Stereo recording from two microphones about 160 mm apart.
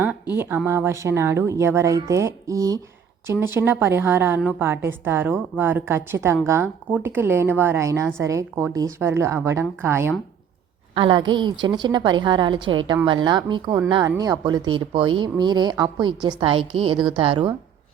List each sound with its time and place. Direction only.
0.3 s a woman's voice: 15° right (ahead or behind)
10.9 s a woman's voice: 30° right (ahead or behind)